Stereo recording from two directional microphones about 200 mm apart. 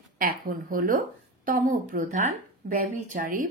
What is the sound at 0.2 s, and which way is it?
Speech, 45° right (ahead or behind).